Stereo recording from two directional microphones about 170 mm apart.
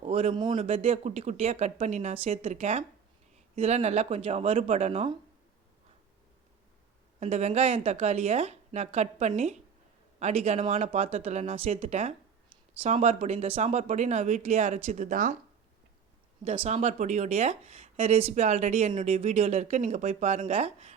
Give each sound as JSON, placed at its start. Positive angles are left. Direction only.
{"t": 0.0, "sound": "speech", "side_deg": -35}
{"t": 7.2, "sound": "speech", "side_deg": -40}
{"t": 16.4, "sound": "speech", "side_deg": -35}